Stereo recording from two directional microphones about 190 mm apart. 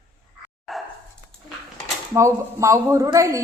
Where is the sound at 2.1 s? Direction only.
15° right (ahead or behind).